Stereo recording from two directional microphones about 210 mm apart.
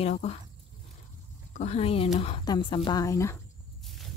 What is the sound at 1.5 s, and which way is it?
A woman's voice, 30° left (ahead or behind).